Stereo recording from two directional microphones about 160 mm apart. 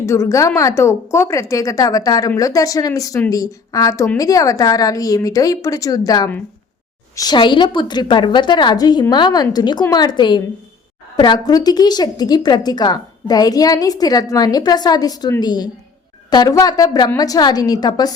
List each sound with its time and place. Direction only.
0.0 s a woman's voice: 15° left (ahead or behind)